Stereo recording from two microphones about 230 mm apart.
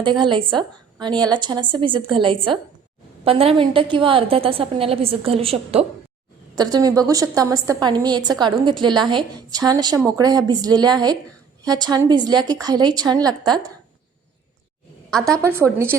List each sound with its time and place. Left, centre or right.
0.0 s a woman's voice: right